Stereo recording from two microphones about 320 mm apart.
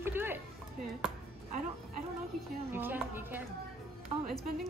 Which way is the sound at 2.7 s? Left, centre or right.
Centre.